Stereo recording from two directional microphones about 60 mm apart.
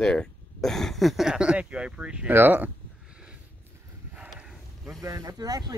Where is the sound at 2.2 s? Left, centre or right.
Right.